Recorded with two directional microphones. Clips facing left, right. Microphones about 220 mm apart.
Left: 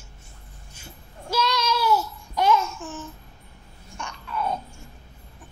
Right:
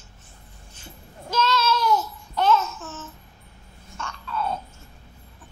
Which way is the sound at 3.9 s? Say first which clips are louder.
Right 1 dB; 15° left (ahead or behind).